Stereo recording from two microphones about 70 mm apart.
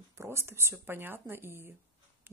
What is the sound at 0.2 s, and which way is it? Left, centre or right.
Speech, right.